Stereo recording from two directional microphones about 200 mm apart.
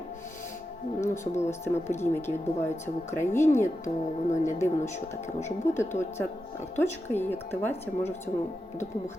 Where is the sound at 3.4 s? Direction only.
35° left (ahead or behind).